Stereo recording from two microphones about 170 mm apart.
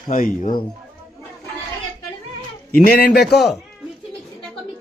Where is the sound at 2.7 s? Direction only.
60° left (ahead or behind).